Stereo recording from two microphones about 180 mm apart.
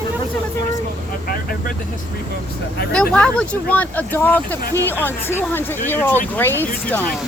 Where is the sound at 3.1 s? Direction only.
5° left (ahead or behind).